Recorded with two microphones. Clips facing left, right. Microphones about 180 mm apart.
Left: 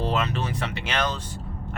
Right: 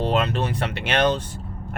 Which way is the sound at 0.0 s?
60° right (ahead or behind).